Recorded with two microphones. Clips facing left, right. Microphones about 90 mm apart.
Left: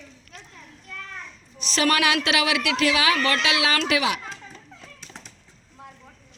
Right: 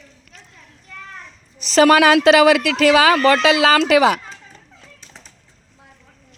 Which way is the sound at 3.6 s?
75° right (ahead or behind).